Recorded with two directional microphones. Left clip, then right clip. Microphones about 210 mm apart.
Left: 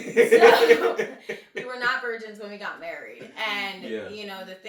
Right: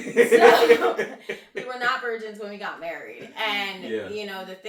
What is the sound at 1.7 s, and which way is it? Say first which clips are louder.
Speech: right 1 dB; 10° right (ahead or behind).